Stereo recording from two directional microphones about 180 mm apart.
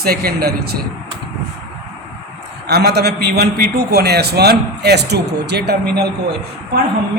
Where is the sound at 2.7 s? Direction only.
65° right (ahead or behind).